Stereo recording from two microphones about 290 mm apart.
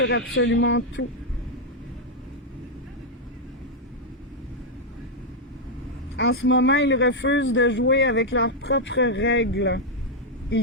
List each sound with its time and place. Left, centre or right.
0.0 s a man's voice: left
6.1 s a man's voice: left